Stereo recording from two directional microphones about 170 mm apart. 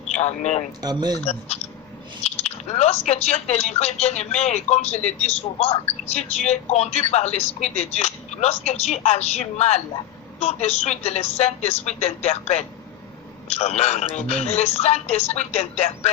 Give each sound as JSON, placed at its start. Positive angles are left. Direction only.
{"t": 0.1, "sound": "speech", "side_deg": 40}
{"t": 0.8, "sound": "speech", "side_deg": -25}
{"t": 1.2, "sound": "speech", "side_deg": 40}